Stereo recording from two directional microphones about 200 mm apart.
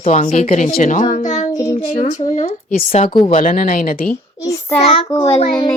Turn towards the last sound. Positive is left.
turn(degrees=25)  # may be behind; listen again after turning